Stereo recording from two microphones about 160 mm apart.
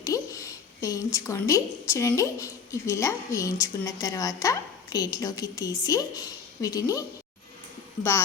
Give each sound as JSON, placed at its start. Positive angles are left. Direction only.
{"t": 0.0, "sound": "a woman's voice", "side_deg": 20}